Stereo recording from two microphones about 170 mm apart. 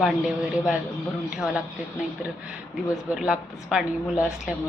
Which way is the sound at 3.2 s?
5° right (ahead or behind).